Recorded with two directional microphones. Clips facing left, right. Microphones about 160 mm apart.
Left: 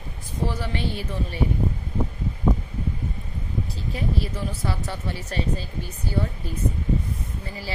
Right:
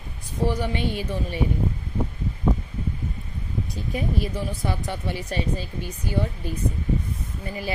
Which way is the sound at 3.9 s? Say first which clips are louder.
Right 2 dB; 15° right (ahead or behind).